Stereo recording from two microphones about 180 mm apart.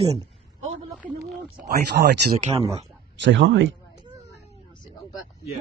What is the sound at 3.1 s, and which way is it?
Speech, 90° right.